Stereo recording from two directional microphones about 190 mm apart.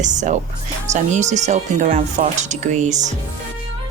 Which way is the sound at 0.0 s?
40° right (ahead or behind).